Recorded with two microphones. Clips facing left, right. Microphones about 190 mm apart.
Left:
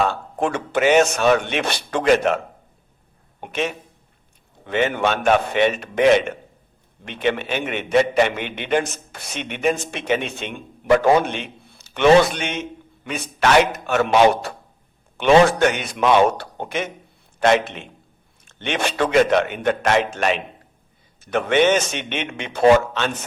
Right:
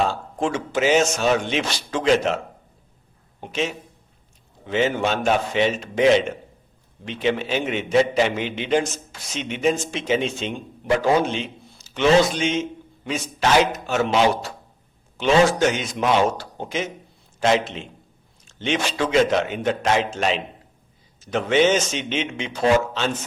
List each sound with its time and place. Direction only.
0.1 s a man's voice: 60° left (ahead or behind)
3.4 s a man's voice: 55° left (ahead or behind)